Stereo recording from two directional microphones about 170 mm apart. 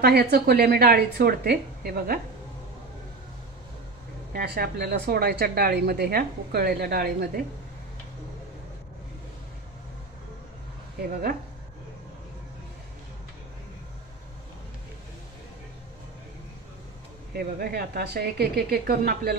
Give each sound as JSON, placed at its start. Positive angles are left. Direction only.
{"t": 0.0, "sound": "a woman's voice", "side_deg": -70}
{"t": 4.3, "sound": "a woman's voice", "side_deg": -60}
{"t": 11.0, "sound": "a woman's voice", "side_deg": -65}
{"t": 17.4, "sound": "a woman's voice", "side_deg": -65}